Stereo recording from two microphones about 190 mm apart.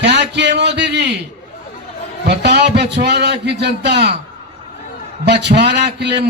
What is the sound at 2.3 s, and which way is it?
A man's voice, 60° right (ahead or behind).